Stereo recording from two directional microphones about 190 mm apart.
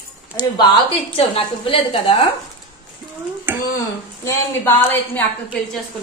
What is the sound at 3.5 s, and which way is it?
Speech, 10° right (ahead or behind).